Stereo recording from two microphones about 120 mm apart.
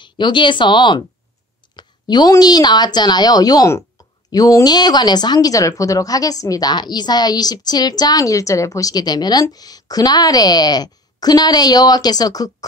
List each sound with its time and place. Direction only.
0.0 s speech: 40° left (ahead or behind)